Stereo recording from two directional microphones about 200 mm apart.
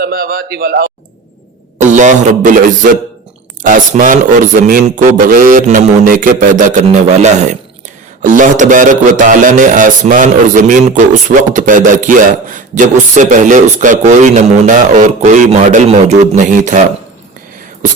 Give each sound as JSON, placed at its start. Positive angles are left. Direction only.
{"t": 0.0, "sound": "a man's voice", "side_deg": -50}
{"t": 1.9, "sound": "music", "side_deg": -40}